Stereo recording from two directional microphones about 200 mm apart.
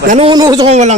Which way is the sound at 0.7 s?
35° right (ahead or behind).